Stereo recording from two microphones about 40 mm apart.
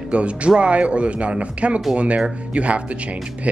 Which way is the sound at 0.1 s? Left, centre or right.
Right.